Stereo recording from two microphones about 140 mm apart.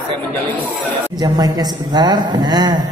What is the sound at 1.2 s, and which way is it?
A woman's voice, 25° right (ahead or behind).